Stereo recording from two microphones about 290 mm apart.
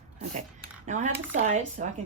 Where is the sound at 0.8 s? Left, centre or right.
Right.